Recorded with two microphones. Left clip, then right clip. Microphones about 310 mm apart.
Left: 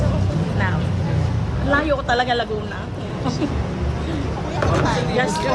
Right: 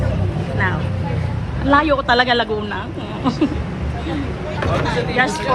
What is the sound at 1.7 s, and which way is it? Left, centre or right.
Speech, centre.